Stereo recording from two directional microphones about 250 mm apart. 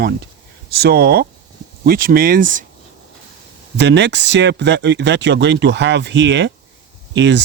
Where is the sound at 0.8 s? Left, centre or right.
Right.